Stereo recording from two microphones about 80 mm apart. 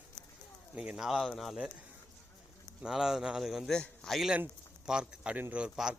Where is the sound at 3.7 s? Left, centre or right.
Centre.